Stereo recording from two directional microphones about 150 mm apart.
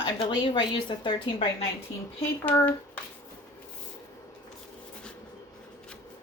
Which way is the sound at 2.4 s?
15° left (ahead or behind).